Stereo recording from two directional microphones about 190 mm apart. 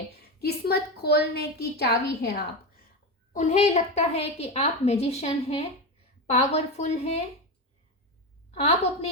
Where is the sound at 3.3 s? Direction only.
40° left (ahead or behind).